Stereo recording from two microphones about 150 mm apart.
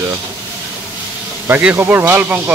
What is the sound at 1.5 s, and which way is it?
Speech, 10° right (ahead or behind).